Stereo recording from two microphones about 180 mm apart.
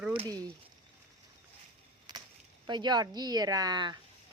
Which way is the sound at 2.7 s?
25° right (ahead or behind).